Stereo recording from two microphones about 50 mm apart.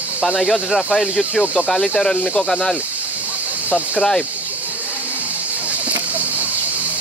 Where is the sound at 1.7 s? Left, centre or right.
Centre.